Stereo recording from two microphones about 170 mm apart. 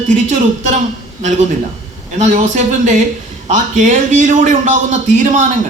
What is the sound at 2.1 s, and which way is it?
A man's voice, 45° right (ahead or behind).